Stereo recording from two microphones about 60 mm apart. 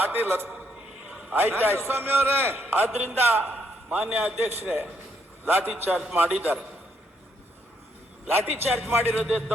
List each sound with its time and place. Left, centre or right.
0.0 s a man's voice: right
1.0 s a sound: centre
1.3 s a man's voice: right
8.4 s a man's voice: right